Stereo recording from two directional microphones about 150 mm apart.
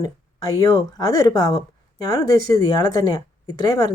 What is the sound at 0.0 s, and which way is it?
Speech, 25° left (ahead or behind).